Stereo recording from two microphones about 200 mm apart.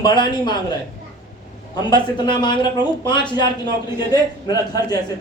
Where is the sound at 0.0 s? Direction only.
20° left (ahead or behind).